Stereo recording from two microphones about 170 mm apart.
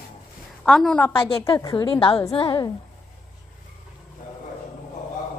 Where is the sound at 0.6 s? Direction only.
5° left (ahead or behind).